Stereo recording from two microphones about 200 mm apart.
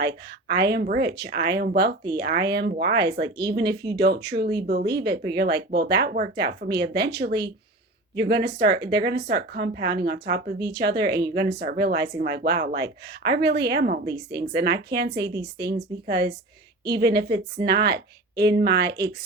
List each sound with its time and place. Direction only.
0.0 s speech: 55° right (ahead or behind)